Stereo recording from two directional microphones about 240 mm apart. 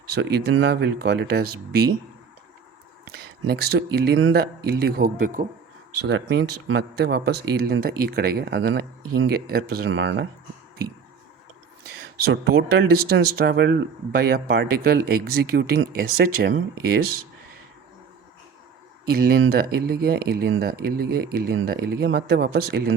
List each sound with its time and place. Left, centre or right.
0.1 s speech: right
3.4 s speech: right
6.1 s speech: right
12.3 s speech: right
19.0 s speech: right